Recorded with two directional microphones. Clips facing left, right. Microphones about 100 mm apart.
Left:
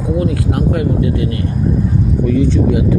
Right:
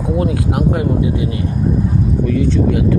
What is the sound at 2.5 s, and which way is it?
Speech, 20° left (ahead or behind).